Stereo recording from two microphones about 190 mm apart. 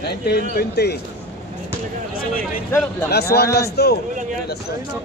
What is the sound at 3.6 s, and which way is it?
Speech, 60° left (ahead or behind).